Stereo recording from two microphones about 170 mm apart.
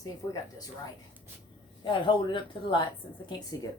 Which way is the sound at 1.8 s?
30° left (ahead or behind).